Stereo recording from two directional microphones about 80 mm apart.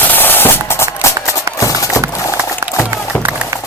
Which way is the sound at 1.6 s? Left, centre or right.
Left.